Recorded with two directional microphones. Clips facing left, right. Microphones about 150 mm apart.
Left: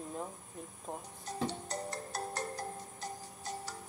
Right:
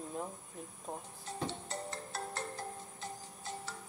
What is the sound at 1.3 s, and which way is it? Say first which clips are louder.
Music: left 3 dB; 40° left (ahead or behind).